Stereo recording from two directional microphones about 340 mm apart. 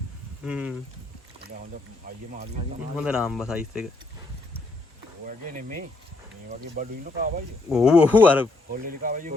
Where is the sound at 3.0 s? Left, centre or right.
Centre.